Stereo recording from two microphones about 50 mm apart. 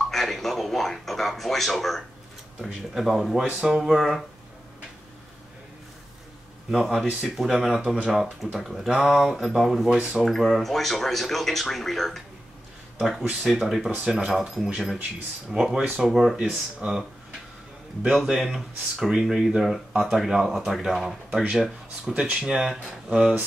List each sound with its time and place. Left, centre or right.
0.0 s a man's voice: centre
6.7 s speech: centre
7.8 s speech: right
8.1 s speech: centre
9.9 s speech: centre
10.2 s speech: centre
13.2 s speech: right
13.5 s speech: centre
18.4 s speech: centre
21.4 s speech: centre